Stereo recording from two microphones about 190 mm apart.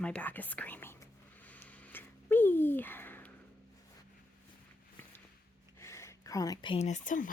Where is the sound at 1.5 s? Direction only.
10° left (ahead or behind).